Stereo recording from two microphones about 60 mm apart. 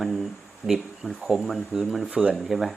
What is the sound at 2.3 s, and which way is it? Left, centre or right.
Speech, centre.